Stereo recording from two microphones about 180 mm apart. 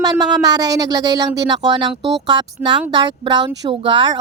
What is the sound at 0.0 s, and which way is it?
Speech, 20° right (ahead or behind).